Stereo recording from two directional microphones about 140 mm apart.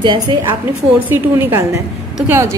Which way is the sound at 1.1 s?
15° right (ahead or behind).